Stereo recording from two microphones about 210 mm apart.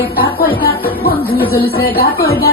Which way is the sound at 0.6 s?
45° left (ahead or behind).